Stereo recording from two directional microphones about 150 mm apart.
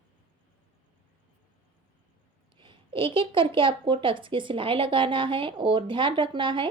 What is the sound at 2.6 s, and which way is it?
A woman's voice, 35° right (ahead or behind).